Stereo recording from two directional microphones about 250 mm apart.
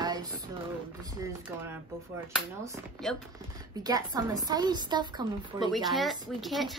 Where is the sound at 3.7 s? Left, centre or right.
Centre.